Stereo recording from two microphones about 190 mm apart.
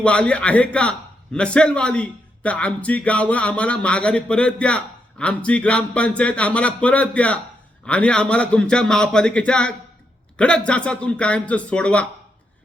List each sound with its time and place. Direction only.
0.0 s a man's voice: 5° left (ahead or behind)